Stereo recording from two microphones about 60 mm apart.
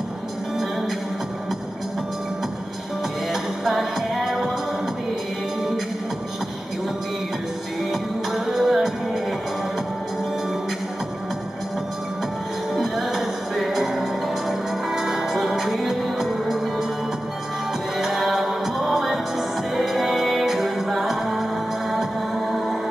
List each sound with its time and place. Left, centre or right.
3.6 s music: centre
7.9 s music: centre
12.7 s music: centre
17.9 s music: centre